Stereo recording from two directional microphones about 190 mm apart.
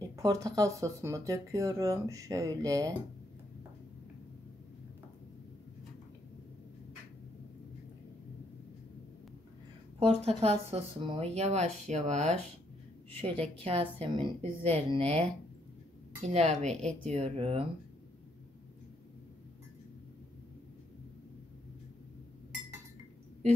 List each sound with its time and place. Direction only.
0.0 s speech: 20° right (ahead or behind)
9.9 s speech: 35° right (ahead or behind)
16.7 s speech: 5° left (ahead or behind)
17.1 s speech: 30° right (ahead or behind)